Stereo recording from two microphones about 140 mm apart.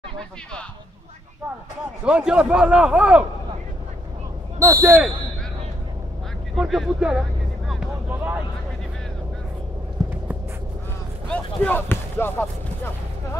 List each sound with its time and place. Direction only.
2.0 s a man's voice: 5° right (ahead or behind)
4.6 s speech: 25° right (ahead or behind)
6.5 s speech: centre (ahead or behind)
8.1 s vehicle: 15° right (ahead or behind)
11.2 s speech: 10° left (ahead or behind)